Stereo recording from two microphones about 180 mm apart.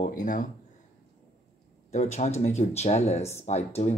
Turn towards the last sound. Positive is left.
turn(degrees=40)  # may be behind; listen again after turning